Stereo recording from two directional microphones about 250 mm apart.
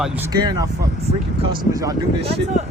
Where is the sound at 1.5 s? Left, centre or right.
Centre.